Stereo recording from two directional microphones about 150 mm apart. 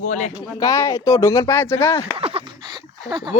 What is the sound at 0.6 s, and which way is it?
Speech, 20° left (ahead or behind).